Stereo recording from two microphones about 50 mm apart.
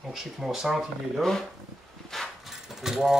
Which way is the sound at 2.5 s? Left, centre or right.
Centre.